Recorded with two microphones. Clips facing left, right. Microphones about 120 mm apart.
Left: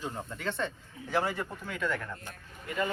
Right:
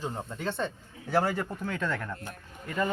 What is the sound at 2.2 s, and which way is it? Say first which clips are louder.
Speech: right 2 dB; 35° right (ahead or behind).